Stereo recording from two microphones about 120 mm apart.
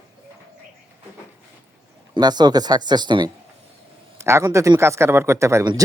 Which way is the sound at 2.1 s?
35° right (ahead or behind).